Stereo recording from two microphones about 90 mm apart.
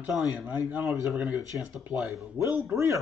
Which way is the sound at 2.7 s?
35° right (ahead or behind).